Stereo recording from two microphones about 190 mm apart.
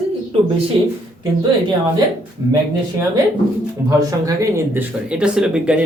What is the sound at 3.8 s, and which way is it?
A man's voice, 15° right (ahead or behind).